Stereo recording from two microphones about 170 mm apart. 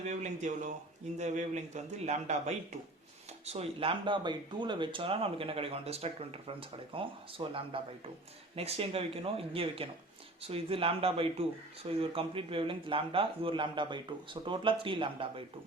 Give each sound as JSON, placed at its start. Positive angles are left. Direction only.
{"t": 0.1, "sound": "a man's voice", "side_deg": -45}